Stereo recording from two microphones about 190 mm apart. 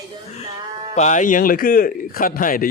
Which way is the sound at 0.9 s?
40° left (ahead or behind).